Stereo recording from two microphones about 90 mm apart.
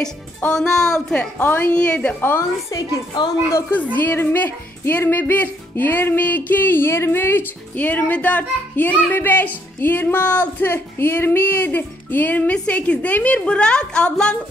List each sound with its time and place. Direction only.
0.5 s a woman's voice: 5° left (ahead or behind)
1.4 s a woman's voice: 20° left (ahead or behind)
2.7 s a woman's voice: 40° left (ahead or behind)
3.9 s a woman's voice: 20° left (ahead or behind)